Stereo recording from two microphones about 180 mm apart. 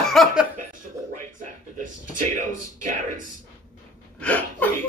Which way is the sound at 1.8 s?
45° right (ahead or behind).